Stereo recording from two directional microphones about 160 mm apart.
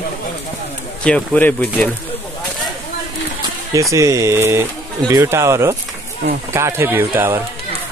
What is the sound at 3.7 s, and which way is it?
Speech, 20° right (ahead or behind).